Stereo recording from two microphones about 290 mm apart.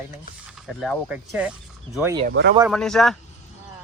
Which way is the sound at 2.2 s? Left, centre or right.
Right.